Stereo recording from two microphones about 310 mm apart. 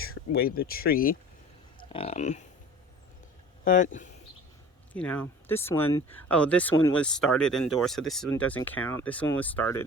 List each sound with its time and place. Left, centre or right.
0.1 s speech: left
1.8 s speech: centre
3.6 s speech: left
4.9 s speech: centre